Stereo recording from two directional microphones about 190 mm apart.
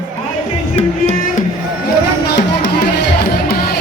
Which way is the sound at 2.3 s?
60° left (ahead or behind).